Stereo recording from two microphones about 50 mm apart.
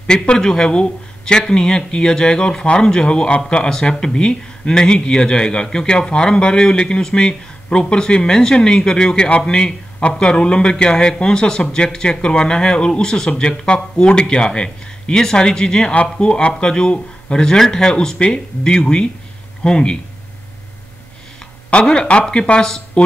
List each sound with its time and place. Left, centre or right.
0.0 s speech: centre
21.8 s speech: left